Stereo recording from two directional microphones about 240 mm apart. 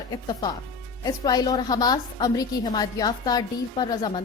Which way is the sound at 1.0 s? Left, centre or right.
Centre.